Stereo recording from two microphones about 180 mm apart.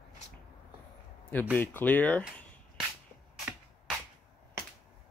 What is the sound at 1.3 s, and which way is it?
Speech, 10° left (ahead or behind).